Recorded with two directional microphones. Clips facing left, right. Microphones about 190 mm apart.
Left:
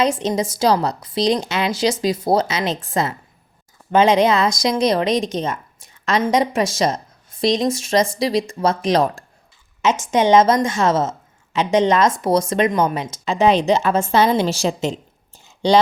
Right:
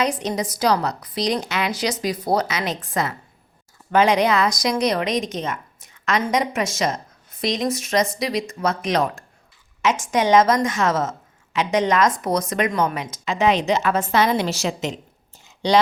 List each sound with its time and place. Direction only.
0.0 s speech: 25° left (ahead or behind)